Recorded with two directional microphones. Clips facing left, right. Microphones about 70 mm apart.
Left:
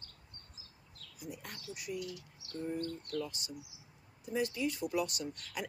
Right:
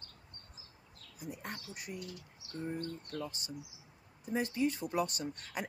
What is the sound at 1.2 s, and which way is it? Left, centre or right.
A woman's voice, right.